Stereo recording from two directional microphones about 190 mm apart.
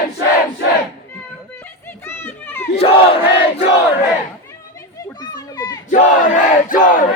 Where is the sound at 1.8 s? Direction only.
10° left (ahead or behind).